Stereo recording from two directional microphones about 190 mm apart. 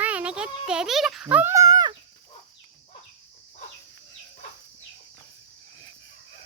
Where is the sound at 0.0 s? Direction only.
5° right (ahead or behind).